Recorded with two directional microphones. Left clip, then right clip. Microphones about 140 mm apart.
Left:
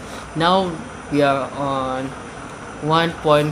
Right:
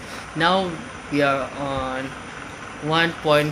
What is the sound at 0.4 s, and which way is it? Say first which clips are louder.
Speech: left 3 dB; 15° left (ahead or behind).